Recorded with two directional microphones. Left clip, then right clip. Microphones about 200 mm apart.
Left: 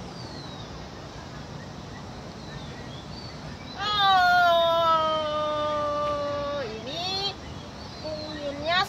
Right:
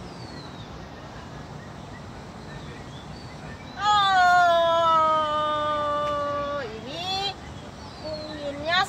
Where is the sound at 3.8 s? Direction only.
10° left (ahead or behind).